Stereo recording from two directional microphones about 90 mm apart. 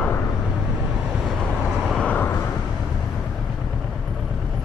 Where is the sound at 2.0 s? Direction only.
15° left (ahead or behind).